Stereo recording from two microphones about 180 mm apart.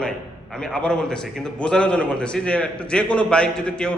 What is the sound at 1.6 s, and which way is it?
A man's voice, 5° left (ahead or behind).